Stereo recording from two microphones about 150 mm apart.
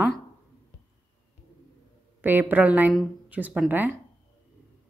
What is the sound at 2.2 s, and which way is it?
A woman's voice, 15° right (ahead or behind).